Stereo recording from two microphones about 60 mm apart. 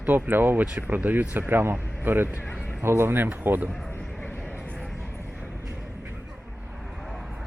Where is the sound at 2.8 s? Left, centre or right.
Right.